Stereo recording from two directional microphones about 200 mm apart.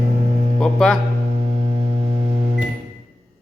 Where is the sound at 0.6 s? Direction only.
5° left (ahead or behind).